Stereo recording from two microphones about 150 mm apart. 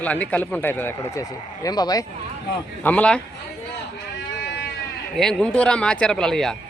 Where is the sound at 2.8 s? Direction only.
10° left (ahead or behind).